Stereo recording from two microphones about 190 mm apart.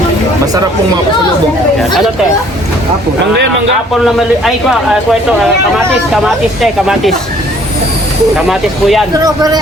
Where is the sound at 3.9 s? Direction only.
Centre (ahead or behind).